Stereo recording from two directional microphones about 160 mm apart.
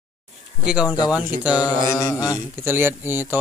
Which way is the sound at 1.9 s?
20° left (ahead or behind).